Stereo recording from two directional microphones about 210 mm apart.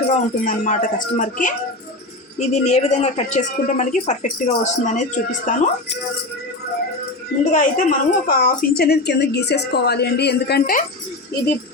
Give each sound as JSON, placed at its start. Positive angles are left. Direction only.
{"t": 0.1, "sound": "a woman's voice", "side_deg": 35}
{"t": 7.5, "sound": "a woman's voice", "side_deg": 40}